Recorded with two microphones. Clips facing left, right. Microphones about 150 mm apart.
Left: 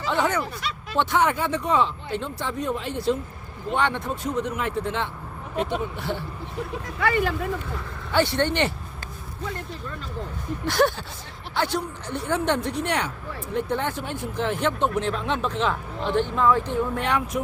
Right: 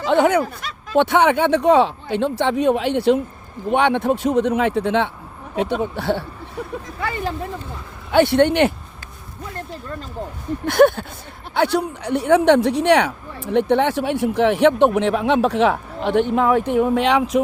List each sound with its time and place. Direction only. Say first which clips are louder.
0.0 s speech: right 8 dB; 60° right (ahead or behind)
7.0 s speech: left 2 dB; 30° right (ahead or behind)
8.1 s speech: right 8 dB; 60° right (ahead or behind)
10.7 s speech: right 8 dB; 55° right (ahead or behind); by 17.4 s 90° right